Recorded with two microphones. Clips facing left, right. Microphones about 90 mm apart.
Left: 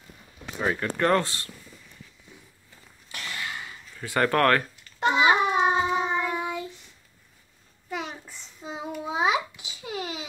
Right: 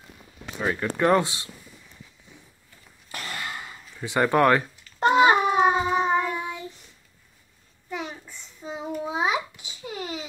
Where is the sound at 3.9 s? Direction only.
20° right (ahead or behind).